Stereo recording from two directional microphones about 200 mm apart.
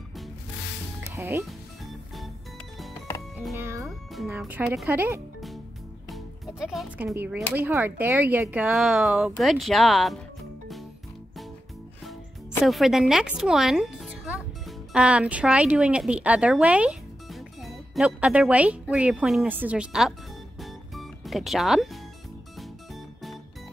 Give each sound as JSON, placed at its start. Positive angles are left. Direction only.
{"t": 1.1, "sound": "speech", "side_deg": -15}
{"t": 3.5, "sound": "music", "side_deg": -10}
{"t": 3.8, "sound": "speech", "side_deg": 0}
{"t": 6.0, "sound": "speech", "side_deg": 0}
{"t": 12.6, "sound": "speech", "side_deg": 0}
{"t": 20.6, "sound": "music", "side_deg": 0}